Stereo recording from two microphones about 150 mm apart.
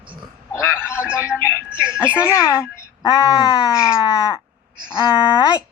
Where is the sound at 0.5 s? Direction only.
15° left (ahead or behind).